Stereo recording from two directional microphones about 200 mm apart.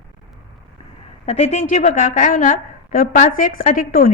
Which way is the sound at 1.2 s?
35° left (ahead or behind).